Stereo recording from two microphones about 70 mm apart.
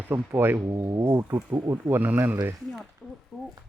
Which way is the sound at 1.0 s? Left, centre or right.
Right.